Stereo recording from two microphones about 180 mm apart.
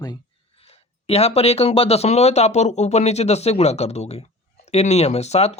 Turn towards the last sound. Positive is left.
turn(degrees=35)  # may be behind; listen again after turning